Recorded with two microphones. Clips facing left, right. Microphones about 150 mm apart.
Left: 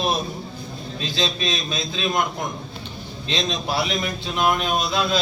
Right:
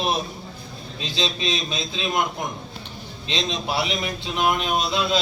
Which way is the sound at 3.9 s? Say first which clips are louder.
Left 1 dB; 15° right (ahead or behind).